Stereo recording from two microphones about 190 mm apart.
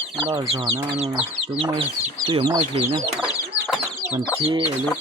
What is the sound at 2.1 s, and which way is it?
Speech, 25° right (ahead or behind).